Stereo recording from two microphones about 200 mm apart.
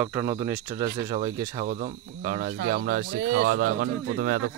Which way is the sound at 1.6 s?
35° right (ahead or behind).